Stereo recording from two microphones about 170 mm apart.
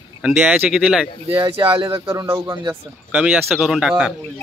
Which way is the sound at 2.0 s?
20° right (ahead or behind).